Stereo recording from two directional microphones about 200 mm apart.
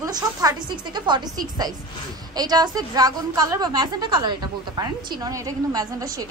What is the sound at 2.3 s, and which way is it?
A woman's voice, 20° right (ahead or behind).